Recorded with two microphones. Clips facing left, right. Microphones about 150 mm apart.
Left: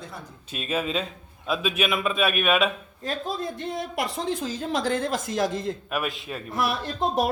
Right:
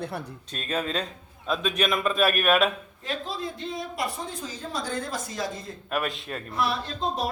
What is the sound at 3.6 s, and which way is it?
Speech, 70° left (ahead or behind).